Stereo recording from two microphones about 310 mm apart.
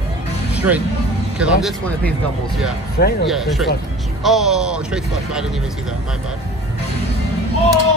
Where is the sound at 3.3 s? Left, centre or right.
Centre.